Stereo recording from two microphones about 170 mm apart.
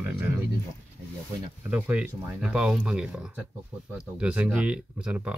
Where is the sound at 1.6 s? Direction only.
10° right (ahead or behind).